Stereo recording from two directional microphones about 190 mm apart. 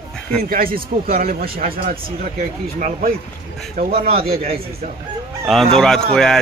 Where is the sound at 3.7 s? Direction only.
50° right (ahead or behind).